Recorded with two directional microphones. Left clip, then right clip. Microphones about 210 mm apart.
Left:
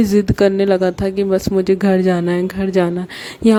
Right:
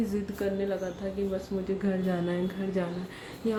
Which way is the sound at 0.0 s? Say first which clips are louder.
Left 18 dB; 50° left (ahead or behind).